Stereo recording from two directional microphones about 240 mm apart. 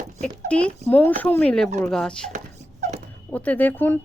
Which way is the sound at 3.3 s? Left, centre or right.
Centre.